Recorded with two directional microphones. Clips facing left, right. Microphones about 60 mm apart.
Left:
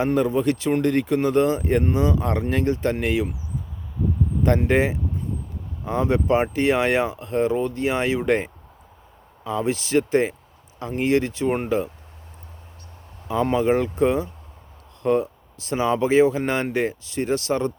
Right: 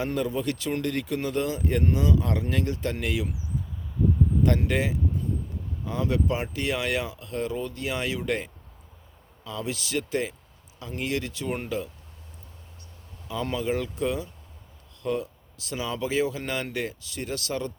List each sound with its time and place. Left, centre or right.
0.0 s speech: left
4.4 s speech: left
13.2 s speech: left